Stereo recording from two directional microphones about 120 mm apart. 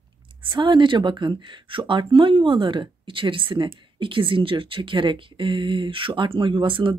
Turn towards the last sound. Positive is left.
turn(degrees=-45)  # may be behind; listen again after turning